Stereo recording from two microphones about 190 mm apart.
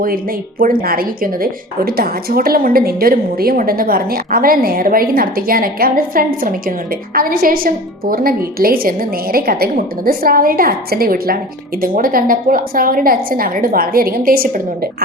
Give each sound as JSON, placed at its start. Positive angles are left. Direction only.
{"t": 0.6, "sound": "a woman's voice", "side_deg": -50}